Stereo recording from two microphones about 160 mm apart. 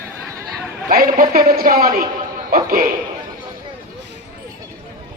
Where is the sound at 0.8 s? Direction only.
65° right (ahead or behind).